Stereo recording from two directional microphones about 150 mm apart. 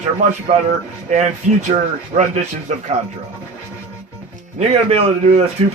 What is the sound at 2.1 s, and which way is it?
Speech, 45° right (ahead or behind).